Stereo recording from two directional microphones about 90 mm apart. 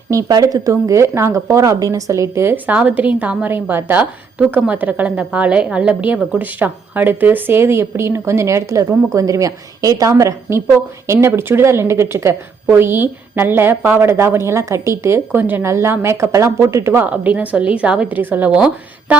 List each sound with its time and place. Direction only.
0.1 s a woman's voice: 40° right (ahead or behind)
2.7 s a woman's voice: 15° right (ahead or behind)
17.1 s a woman's voice: 15° right (ahead or behind)